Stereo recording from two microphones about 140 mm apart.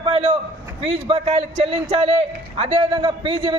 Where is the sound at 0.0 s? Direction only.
40° right (ahead or behind).